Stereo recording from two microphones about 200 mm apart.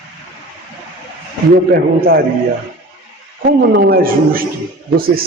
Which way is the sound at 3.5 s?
50° right (ahead or behind).